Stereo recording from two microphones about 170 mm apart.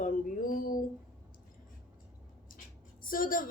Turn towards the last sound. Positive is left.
turn(degrees=55)  # may be behind; listen again after turning